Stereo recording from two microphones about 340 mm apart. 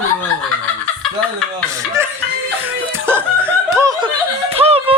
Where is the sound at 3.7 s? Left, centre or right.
Centre.